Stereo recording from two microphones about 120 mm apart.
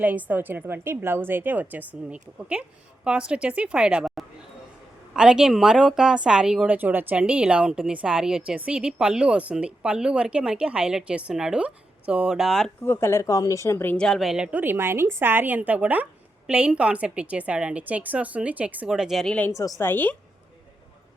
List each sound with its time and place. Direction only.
0.0 s a woman's voice: 15° right (ahead or behind)
12.8 s speech: 20° left (ahead or behind)
13.9 s a woman's voice: 5° left (ahead or behind)
19.5 s speech: 30° left (ahead or behind)
19.8 s a woman's voice: 15° left (ahead or behind)